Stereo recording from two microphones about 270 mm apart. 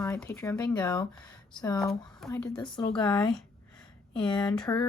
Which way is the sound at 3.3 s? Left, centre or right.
Centre.